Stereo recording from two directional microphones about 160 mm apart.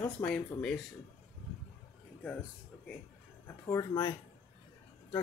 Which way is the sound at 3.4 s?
20° left (ahead or behind).